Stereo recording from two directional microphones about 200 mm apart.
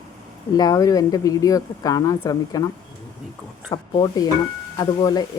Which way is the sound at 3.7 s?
25° left (ahead or behind).